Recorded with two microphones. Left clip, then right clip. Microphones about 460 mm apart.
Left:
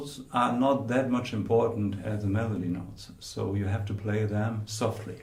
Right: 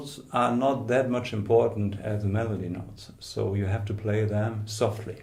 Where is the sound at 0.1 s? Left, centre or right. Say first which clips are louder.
Right 2 dB; right.